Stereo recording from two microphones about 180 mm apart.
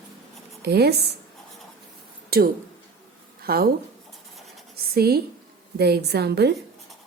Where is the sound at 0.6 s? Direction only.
60° right (ahead or behind).